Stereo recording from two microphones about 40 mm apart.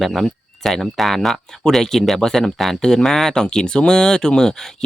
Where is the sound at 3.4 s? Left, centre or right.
Centre.